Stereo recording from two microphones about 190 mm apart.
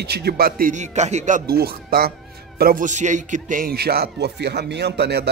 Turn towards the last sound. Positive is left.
turn(degrees=-60)  # may be behind; listen again after turning